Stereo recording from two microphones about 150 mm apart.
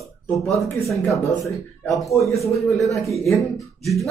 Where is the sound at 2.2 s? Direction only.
20° left (ahead or behind).